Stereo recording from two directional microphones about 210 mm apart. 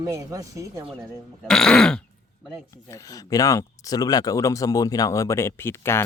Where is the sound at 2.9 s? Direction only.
15° left (ahead or behind).